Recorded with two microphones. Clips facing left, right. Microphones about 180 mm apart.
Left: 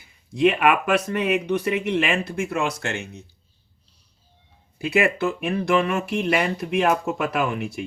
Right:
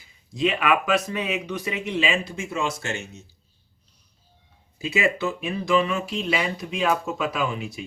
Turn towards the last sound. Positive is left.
turn(degrees=60)  # may be behind; listen again after turning